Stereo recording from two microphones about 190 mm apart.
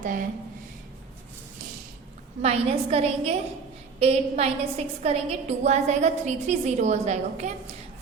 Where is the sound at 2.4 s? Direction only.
35° right (ahead or behind).